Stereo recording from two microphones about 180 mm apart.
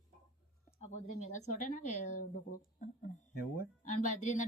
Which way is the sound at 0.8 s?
40° left (ahead or behind).